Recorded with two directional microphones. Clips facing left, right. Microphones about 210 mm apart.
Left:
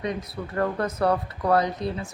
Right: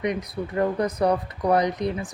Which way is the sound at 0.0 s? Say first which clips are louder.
Right 3 dB; 15° right (ahead or behind).